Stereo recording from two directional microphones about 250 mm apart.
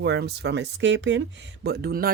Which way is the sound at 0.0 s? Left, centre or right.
Right.